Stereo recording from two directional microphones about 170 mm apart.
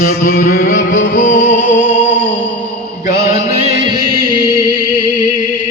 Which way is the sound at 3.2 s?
40° left (ahead or behind).